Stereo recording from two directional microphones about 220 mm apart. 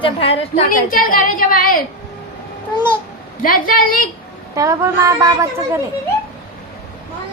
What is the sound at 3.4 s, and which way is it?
Speech, 40° left (ahead or behind).